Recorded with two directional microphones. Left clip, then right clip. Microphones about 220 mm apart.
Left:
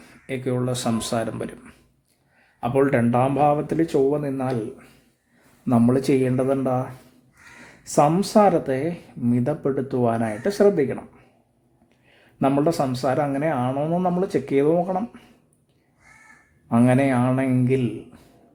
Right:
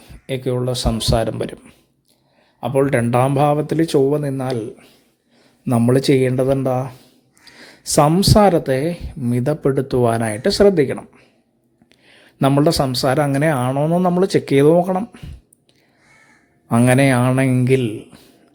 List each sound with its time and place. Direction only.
0.0 s speech: 20° right (ahead or behind)
2.6 s speech: 20° right (ahead or behind)
16.6 s speech: 30° right (ahead or behind)